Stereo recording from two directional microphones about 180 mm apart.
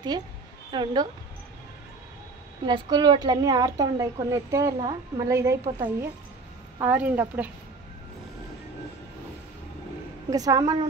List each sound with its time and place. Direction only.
0.7 s a woman's voice: 25° right (ahead or behind)
2.6 s a woman's voice: 25° right (ahead or behind); by 7.5 s 10° right (ahead or behind)
10.3 s a woman's voice: 20° right (ahead or behind)